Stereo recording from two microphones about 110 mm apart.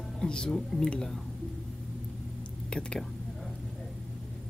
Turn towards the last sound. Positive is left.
turn(degrees=10)  # may be behind; listen again after turning